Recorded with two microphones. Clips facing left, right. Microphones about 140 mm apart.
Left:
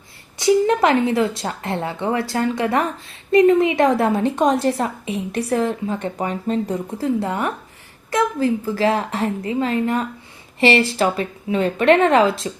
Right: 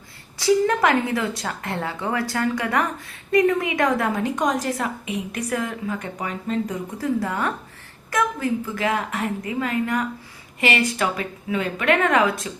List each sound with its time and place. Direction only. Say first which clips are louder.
0.3 s a woman's voice: left 3 dB; 20° left (ahead or behind)